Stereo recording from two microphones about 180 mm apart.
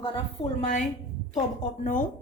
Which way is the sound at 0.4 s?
25° left (ahead or behind).